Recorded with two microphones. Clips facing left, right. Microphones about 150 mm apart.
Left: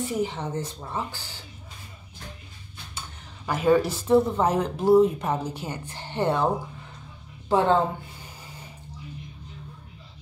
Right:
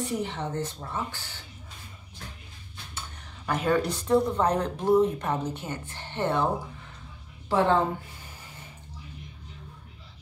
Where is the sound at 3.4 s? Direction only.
10° left (ahead or behind).